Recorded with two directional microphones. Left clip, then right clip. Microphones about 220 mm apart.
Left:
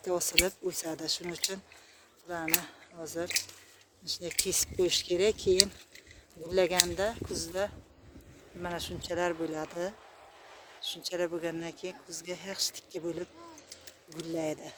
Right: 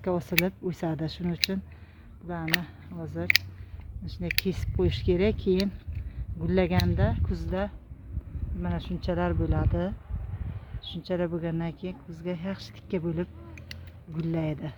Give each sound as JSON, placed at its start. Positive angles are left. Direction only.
{"t": 0.0, "sound": "speech", "side_deg": 0}
{"t": 2.2, "sound": "speech", "side_deg": 10}